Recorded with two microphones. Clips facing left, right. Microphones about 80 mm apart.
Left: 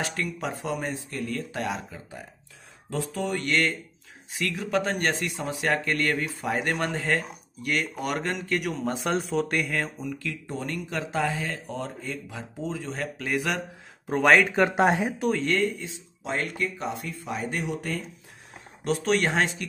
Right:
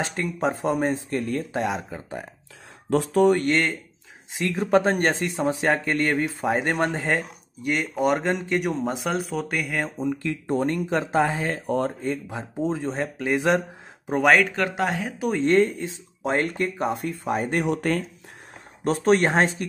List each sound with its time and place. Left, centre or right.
0.0 s speech: right
1.9 s speech: right
3.4 s speech: right
8.8 s speech: centre
9.8 s speech: right
10.4 s speech: right
11.6 s speech: right
12.0 s speech: right
14.2 s speech: centre
14.5 s speech: left
15.3 s speech: right
15.8 s speech: right
17.6 s speech: right
18.9 s speech: right